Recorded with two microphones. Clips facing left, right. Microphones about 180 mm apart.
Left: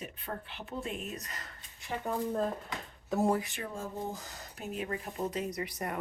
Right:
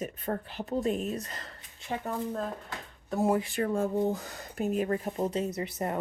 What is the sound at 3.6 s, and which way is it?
Speech, 65° right (ahead or behind).